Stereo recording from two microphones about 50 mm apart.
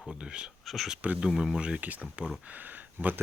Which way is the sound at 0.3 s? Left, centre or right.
Centre.